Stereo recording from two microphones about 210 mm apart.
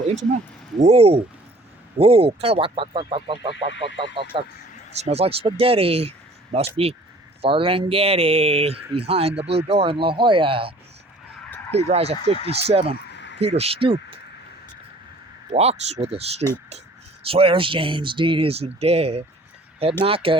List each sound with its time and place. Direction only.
0.1 s speech: 35° right (ahead or behind)
15.5 s speech: 30° right (ahead or behind)